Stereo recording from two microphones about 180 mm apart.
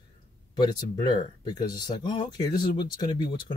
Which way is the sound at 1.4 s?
20° left (ahead or behind).